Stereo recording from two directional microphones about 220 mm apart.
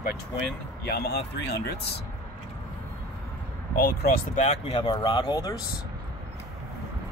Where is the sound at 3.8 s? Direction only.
35° left (ahead or behind); by 5.6 s 20° left (ahead or behind).